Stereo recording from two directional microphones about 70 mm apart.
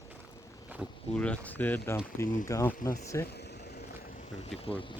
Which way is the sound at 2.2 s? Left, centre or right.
Left.